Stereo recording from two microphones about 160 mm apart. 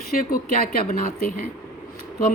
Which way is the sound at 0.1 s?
65° left (ahead or behind).